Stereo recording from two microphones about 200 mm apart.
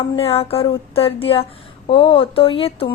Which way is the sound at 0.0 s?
30° left (ahead or behind).